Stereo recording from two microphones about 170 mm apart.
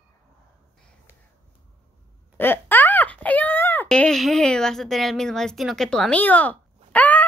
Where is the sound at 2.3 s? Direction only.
15° left (ahead or behind).